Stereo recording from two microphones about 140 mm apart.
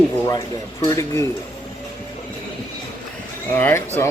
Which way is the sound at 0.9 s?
20° left (ahead or behind).